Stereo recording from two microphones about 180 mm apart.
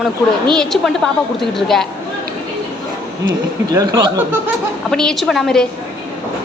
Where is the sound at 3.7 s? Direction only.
20° right (ahead or behind).